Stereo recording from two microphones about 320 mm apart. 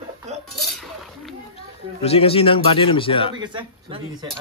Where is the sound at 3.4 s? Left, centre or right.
Centre.